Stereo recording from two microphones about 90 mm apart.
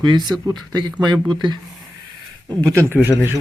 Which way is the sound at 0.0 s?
55° right (ahead or behind).